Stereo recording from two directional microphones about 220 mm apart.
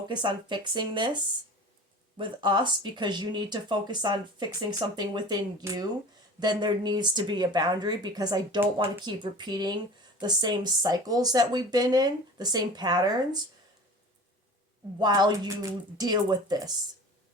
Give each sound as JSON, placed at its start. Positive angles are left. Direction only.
{"t": 0.1, "sound": "speech", "side_deg": -20}
{"t": 14.9, "sound": "speech", "side_deg": -20}